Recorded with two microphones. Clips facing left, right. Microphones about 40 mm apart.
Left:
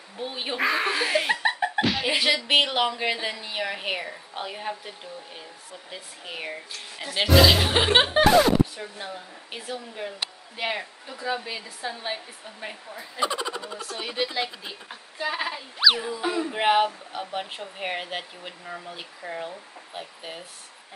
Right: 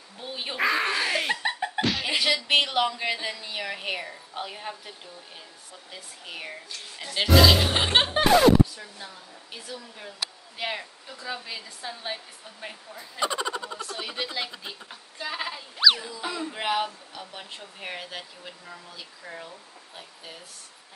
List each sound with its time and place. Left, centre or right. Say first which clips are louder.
0.2 s speech: left 1 dB; centre
8.7 s speech: left 6 dB; left
10.6 s speech: left 3 dB; centre